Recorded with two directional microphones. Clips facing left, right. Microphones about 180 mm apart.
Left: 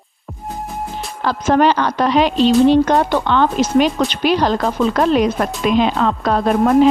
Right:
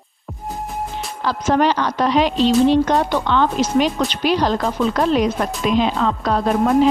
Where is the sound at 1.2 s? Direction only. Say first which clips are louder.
Left 3 dB; 55° left (ahead or behind).